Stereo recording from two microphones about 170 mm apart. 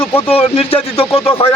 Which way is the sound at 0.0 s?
15° left (ahead or behind).